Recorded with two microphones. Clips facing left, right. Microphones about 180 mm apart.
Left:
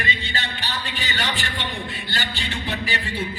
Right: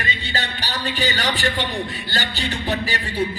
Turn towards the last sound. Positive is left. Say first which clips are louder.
# right 4 dB
turn(degrees=-40)  # may be behind; listen again after turning